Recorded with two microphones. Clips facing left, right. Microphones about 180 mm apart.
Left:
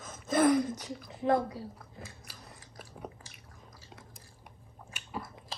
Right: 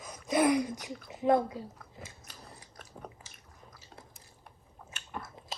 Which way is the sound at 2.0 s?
20° right (ahead or behind).